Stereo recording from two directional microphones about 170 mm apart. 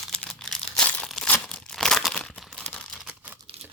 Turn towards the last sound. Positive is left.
turn(degrees=-10)  # may be behind; listen again after turning